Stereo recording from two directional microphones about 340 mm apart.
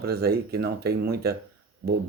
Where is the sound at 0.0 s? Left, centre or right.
Right.